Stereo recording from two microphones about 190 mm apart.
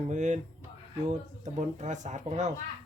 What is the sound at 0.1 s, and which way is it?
Speech, 40° right (ahead or behind).